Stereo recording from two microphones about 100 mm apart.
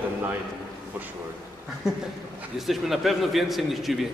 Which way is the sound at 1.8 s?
5° right (ahead or behind).